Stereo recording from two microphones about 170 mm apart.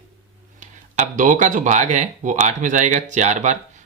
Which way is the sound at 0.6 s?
50° right (ahead or behind).